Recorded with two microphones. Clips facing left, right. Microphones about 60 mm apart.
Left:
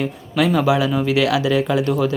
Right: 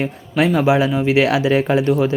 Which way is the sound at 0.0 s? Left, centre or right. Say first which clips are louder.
Right 1 dB; right.